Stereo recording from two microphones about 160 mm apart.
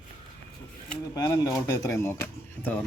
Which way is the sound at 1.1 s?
20° left (ahead or behind).